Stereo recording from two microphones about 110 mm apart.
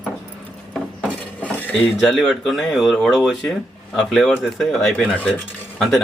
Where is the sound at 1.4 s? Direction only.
15° left (ahead or behind).